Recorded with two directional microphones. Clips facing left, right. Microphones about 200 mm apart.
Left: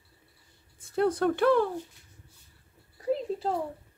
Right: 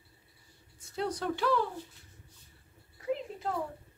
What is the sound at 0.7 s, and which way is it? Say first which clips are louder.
Speech: left 9 dB; 55° left (ahead or behind).